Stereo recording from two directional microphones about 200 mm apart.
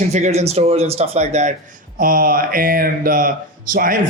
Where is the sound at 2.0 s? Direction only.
45° right (ahead or behind).